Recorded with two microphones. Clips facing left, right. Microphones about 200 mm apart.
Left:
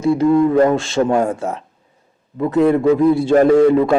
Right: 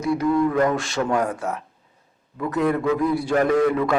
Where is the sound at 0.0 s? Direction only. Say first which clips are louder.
Left 7 dB; 25° left (ahead or behind).